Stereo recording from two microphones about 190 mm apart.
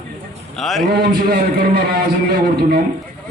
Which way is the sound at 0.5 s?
Centre (ahead or behind).